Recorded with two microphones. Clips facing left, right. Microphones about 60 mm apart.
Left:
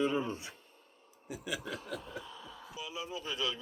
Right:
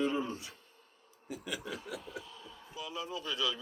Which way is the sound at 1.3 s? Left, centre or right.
Centre.